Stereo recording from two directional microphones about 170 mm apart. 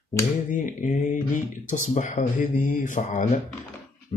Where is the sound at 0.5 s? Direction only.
50° left (ahead or behind).